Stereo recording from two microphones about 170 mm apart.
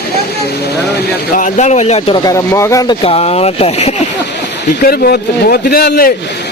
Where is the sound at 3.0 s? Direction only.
35° left (ahead or behind).